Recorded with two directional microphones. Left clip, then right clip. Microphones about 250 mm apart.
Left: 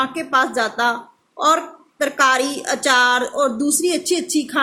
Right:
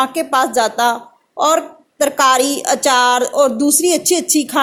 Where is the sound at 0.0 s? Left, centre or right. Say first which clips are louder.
Right 3 dB; centre.